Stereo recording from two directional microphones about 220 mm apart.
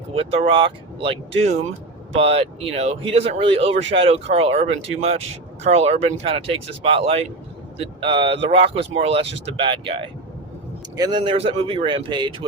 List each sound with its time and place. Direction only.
0.1 s speech: 25° right (ahead or behind)